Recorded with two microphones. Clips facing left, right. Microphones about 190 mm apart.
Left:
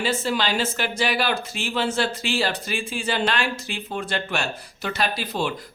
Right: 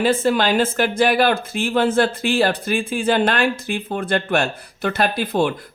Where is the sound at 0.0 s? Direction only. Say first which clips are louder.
Right 7 dB; 55° right (ahead or behind).